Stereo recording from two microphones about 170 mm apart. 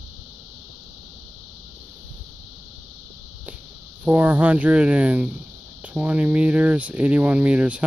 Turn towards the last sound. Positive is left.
turn(degrees=-5)  # may be behind; listen again after turning